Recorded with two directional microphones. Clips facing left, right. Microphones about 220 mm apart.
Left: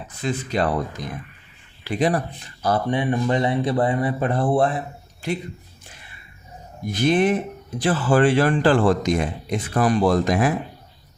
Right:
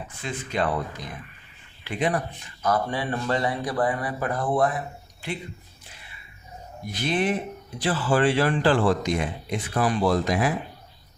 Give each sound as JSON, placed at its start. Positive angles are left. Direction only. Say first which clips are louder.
{"t": 0.2, "sound": "speech", "louder": "left 5 dB", "side_deg": 40}
{"t": 1.8, "sound": "speech", "louder": "left 4 dB", "side_deg": 35}
{"t": 6.8, "sound": "a man's voice", "louder": "left 6 dB", "side_deg": 45}